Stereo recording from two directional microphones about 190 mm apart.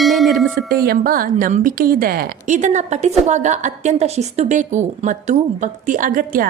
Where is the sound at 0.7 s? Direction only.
50° right (ahead or behind).